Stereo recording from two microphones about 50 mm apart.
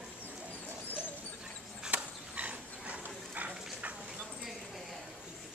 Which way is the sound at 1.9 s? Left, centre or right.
Right.